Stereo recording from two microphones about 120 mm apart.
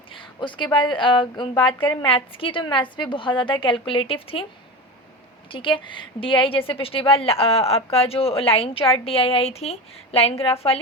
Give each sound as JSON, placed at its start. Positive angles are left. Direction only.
{"t": 0.1, "sound": "a sound", "side_deg": 45}
{"t": 0.9, "sound": "a woman's voice", "side_deg": 45}
{"t": 5.5, "sound": "a woman's voice", "side_deg": 45}